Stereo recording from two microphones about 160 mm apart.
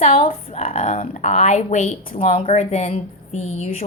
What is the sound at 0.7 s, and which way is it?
Speech, 55° left (ahead or behind).